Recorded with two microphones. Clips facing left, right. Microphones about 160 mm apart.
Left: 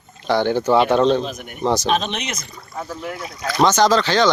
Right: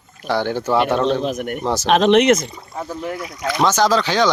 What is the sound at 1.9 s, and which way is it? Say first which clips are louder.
Speech: right 10 dB; 70° right (ahead or behind).